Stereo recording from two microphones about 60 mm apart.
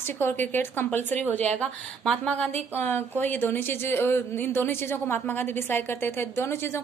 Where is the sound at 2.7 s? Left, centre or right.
Left.